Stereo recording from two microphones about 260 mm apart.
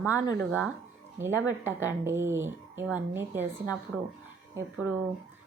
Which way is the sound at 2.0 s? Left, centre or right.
Centre.